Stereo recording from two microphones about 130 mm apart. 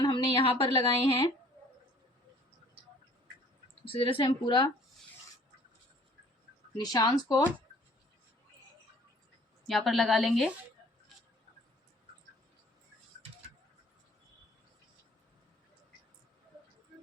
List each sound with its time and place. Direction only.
0.0 s speech: 40° left (ahead or behind)
3.8 s speech: 45° left (ahead or behind)
6.7 s speech: 30° left (ahead or behind)
9.6 s a woman's voice: centre (ahead or behind)